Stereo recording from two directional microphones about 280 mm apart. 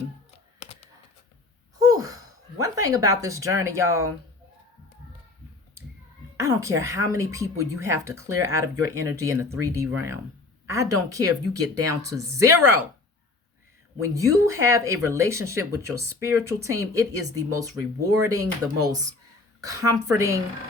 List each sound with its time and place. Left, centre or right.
0.6 s a sound: left
1.9 s speech: centre
6.4 s a woman's voice: centre
14.0 s a woman's voice: centre